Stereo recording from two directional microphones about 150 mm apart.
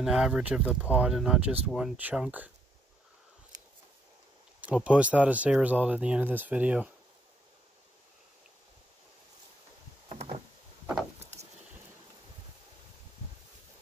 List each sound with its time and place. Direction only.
0.0 s speech: 5° right (ahead or behind)
4.6 s speech: 10° right (ahead or behind)
10.0 s a sound: 45° right (ahead or behind)